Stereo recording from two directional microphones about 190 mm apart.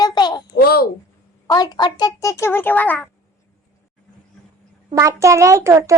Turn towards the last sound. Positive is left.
turn(degrees=-15)  # may be behind; listen again after turning